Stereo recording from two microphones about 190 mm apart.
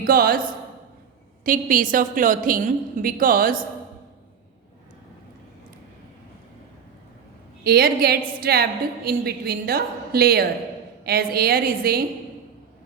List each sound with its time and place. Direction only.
0.0 s a woman's voice: 50° right (ahead or behind)
7.6 s a woman's voice: 55° right (ahead or behind)